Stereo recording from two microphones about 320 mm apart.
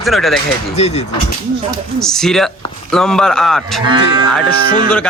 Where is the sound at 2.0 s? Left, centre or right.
Centre.